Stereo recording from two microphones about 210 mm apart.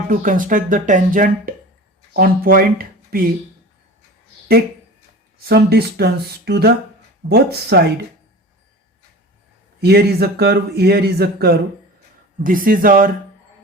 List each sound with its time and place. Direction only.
0.1 s speech: 40° right (ahead or behind)
5.5 s speech: 50° right (ahead or behind)
9.8 s speech: 50° right (ahead or behind)